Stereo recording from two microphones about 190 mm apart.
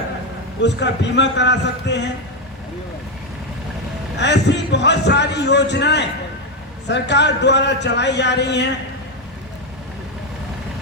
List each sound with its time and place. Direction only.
0.6 s a man's voice: 65° left (ahead or behind)
4.2 s a man's voice: 65° left (ahead or behind)